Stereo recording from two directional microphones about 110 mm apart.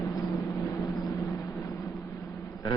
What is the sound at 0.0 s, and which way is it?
Vehicle, 30° left (ahead or behind).